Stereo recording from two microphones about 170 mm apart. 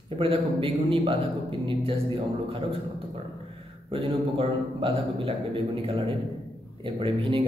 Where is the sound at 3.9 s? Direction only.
35° right (ahead or behind).